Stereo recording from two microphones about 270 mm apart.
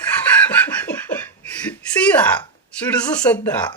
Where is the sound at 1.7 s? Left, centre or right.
Centre.